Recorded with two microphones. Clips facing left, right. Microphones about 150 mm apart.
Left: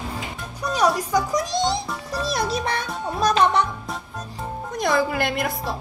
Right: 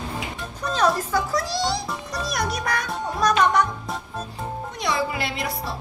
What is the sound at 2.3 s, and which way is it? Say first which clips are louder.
Music: left 2 dB; 25° left (ahead or behind).